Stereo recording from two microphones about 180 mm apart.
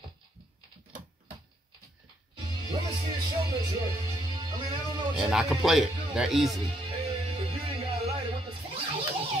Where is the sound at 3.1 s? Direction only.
20° right (ahead or behind).